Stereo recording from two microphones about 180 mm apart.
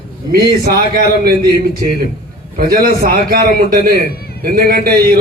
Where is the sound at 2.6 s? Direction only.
55° right (ahead or behind).